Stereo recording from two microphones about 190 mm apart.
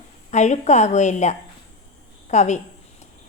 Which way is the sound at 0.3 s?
40° left (ahead or behind).